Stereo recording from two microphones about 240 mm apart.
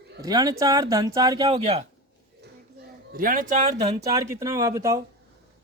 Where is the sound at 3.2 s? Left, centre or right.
Right.